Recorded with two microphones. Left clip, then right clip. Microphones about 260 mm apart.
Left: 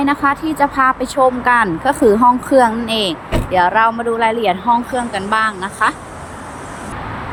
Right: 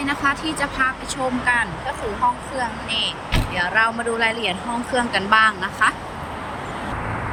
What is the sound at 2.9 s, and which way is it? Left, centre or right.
Speech, centre.